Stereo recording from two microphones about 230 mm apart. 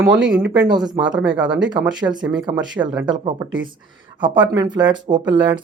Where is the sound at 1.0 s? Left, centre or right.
Centre.